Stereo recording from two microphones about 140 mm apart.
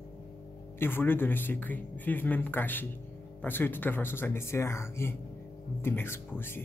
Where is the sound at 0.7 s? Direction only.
15° left (ahead or behind).